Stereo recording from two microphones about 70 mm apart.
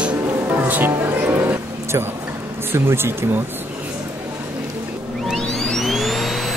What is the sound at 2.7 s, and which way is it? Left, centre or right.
Speech, right.